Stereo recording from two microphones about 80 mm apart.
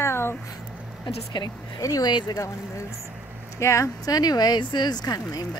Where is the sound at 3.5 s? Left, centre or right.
Left.